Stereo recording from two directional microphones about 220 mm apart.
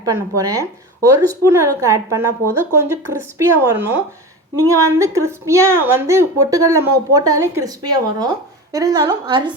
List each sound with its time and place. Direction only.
0.0 s a woman's voice: 15° right (ahead or behind)